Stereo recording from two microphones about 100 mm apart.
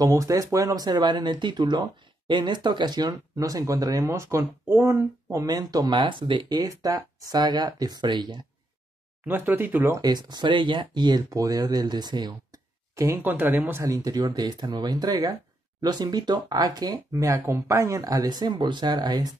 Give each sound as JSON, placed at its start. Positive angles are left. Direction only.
{"t": 0.0, "sound": "speech", "side_deg": -35}
{"t": 5.4, "sound": "speech", "side_deg": -35}
{"t": 5.9, "sound": "speech", "side_deg": -55}
{"t": 6.7, "sound": "speech", "side_deg": -35}
{"t": 9.2, "sound": "speech", "side_deg": -20}
{"t": 9.9, "sound": "speech", "side_deg": -45}
{"t": 12.9, "sound": "speech", "side_deg": -30}
{"t": 13.8, "sound": "speech", "side_deg": -35}